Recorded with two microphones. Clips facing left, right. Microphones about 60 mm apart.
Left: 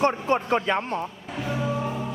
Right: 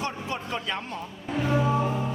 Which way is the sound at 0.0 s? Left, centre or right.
Left.